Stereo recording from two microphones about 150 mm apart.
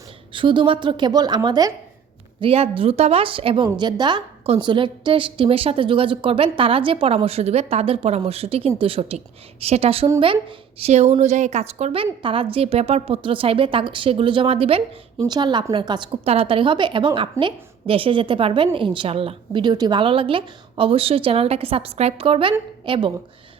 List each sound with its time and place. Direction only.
0.3 s a woman's voice: 35° right (ahead or behind)
2.4 s a woman's voice: 40° right (ahead or behind)